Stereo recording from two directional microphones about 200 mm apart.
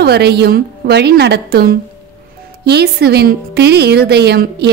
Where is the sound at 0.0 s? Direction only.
55° right (ahead or behind).